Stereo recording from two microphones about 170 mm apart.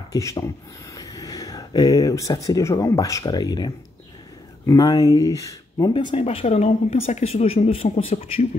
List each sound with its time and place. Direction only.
0.1 s speech: 20° left (ahead or behind); by 8.5 s 35° left (ahead or behind)